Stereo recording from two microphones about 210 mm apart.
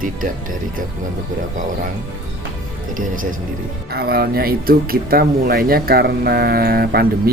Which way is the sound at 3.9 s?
50° right (ahead or behind).